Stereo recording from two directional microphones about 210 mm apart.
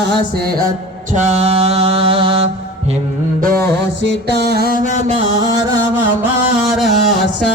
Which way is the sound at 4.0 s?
50° right (ahead or behind).